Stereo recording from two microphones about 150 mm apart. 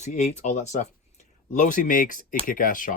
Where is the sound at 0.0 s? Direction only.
50° left (ahead or behind).